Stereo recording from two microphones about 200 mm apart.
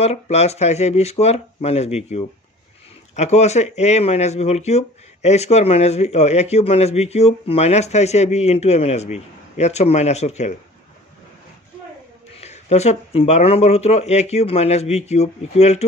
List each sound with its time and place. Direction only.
0.0 s speech: 35° left (ahead or behind)
12.4 s speech: 35° left (ahead or behind)